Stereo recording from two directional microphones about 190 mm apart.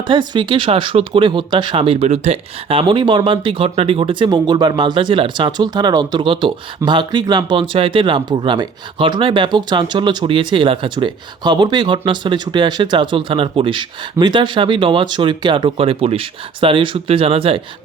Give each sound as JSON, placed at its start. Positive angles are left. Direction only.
{"t": 0.1, "sound": "speech", "side_deg": -25}